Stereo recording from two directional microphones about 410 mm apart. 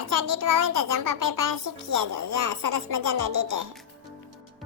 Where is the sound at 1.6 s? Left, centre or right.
Right.